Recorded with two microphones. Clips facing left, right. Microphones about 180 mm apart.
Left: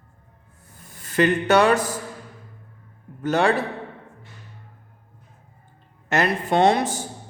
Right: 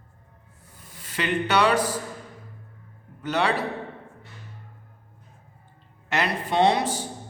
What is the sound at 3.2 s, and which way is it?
Speech, 45° left (ahead or behind).